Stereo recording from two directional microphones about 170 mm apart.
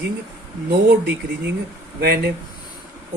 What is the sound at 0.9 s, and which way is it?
Speech, 75° right (ahead or behind).